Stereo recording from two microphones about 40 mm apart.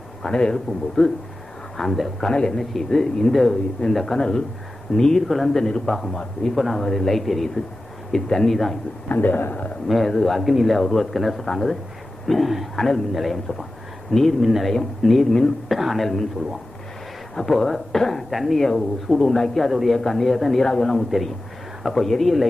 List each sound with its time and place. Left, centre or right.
0.2 s a man's voice: centre
2.2 s speech: centre
9.0 s a man's voice: left
9.8 s speech: centre
10.4 s speech: centre
10.7 s speech: centre
17.3 s speech: centre
19.7 s speech: centre
20.0 s speech: centre
20.7 s speech: centre